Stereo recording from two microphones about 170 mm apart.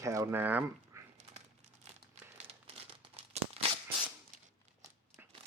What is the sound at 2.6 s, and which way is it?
Crumpling, 35° right (ahead or behind).